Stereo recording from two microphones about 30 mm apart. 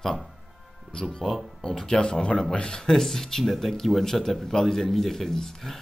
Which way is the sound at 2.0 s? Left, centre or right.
Left.